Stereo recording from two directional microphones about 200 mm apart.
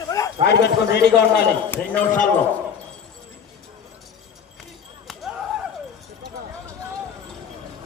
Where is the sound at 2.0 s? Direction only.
40° left (ahead or behind).